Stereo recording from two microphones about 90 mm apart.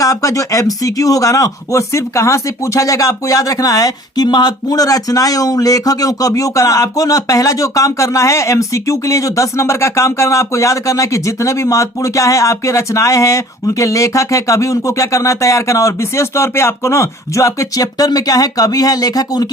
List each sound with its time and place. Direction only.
0.0 s speech: 40° left (ahead or behind)